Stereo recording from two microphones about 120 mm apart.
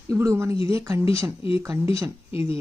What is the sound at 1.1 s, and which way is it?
Speech, 25° right (ahead or behind).